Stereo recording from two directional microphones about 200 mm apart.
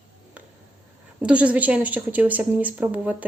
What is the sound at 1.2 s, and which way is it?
A woman's voice, 5° right (ahead or behind).